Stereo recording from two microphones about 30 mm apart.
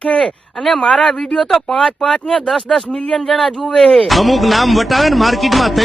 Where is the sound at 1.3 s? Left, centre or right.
Centre.